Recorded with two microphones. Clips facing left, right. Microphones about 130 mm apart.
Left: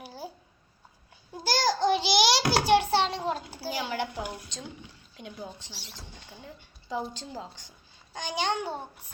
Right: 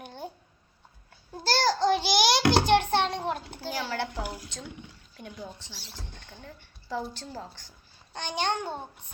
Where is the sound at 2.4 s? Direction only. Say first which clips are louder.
Right 1 dB; 10° left (ahead or behind).